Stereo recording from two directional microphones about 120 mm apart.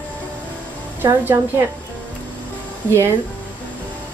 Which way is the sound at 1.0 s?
20° right (ahead or behind).